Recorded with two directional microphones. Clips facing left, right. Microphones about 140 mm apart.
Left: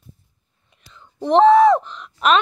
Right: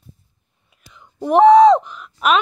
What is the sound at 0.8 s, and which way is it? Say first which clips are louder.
Speech: even; 10° right (ahead or behind).